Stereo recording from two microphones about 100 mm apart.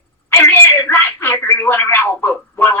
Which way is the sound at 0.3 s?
20° left (ahead or behind).